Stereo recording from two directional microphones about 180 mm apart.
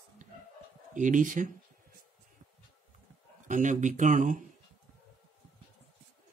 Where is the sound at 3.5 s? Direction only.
45° right (ahead or behind).